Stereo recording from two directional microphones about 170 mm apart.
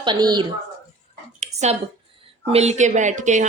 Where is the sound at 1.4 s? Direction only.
40° right (ahead or behind).